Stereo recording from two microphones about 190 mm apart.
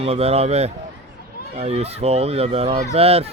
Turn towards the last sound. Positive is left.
turn(degrees=-30)  # may be behind; listen again after turning